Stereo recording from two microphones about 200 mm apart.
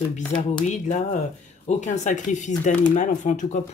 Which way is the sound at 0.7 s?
35° left (ahead or behind).